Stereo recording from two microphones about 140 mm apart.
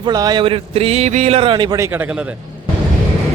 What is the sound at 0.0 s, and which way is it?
A man's voice, 30° right (ahead or behind).